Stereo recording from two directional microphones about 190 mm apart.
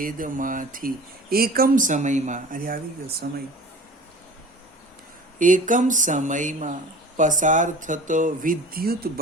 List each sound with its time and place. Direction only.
0.0 s speech: 45° right (ahead or behind)
5.4 s speech: 45° right (ahead or behind)